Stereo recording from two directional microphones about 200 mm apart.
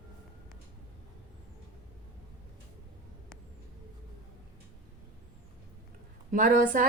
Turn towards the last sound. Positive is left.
turn(degrees=-45)  # may be behind; listen again after turning